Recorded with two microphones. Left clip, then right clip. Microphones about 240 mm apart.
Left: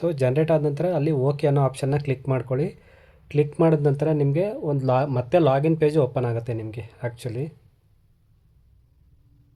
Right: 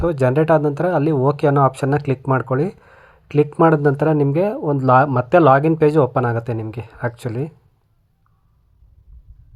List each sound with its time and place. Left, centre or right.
0.0 s speech: centre